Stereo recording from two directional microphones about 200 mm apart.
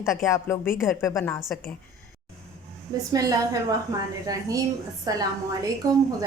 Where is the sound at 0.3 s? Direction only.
15° left (ahead or behind).